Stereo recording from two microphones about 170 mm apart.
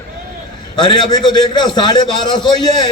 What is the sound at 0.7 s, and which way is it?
A man's voice, 25° left (ahead or behind).